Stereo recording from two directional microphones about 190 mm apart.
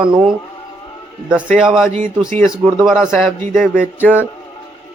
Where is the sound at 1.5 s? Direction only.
5° right (ahead or behind).